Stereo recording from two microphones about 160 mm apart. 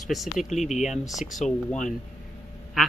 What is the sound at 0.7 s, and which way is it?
Speech, 45° left (ahead or behind).